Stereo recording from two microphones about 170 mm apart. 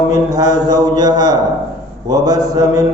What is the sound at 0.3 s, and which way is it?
Mantra, 20° right (ahead or behind).